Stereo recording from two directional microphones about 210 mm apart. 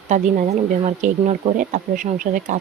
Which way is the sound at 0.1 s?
35° right (ahead or behind).